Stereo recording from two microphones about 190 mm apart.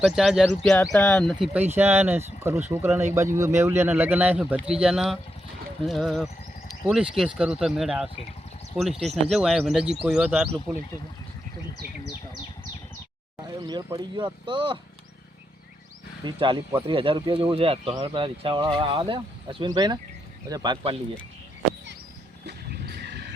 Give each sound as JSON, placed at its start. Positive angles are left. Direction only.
{"t": 0.0, "sound": "speech", "side_deg": 0}
{"t": 1.7, "sound": "speech", "side_deg": -10}
{"t": 13.7, "sound": "speech", "side_deg": -20}
{"t": 16.2, "sound": "speech", "side_deg": -25}
{"t": 22.4, "sound": "vehicle", "side_deg": -60}